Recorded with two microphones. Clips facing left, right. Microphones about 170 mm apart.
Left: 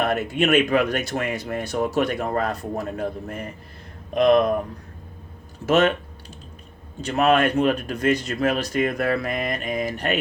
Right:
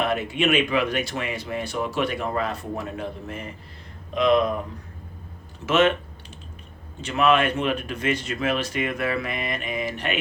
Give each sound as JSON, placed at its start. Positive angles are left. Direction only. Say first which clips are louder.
{"t": 0.0, "sound": "speech", "louder": "left 2 dB", "side_deg": 45}
{"t": 5.6, "sound": "speech", "louder": "left 1 dB", "side_deg": 40}
{"t": 7.0, "sound": "speech", "louder": "left 2 dB", "side_deg": 40}